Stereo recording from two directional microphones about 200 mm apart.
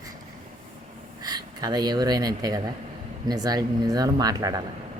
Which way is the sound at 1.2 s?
20° right (ahead or behind).